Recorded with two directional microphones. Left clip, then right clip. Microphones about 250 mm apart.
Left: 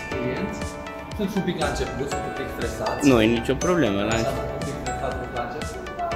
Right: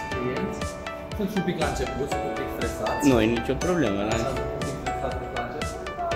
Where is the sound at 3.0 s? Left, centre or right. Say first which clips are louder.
Left 4 dB; centre.